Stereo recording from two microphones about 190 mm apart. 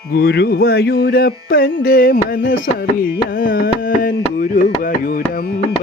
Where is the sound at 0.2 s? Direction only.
55° left (ahead or behind).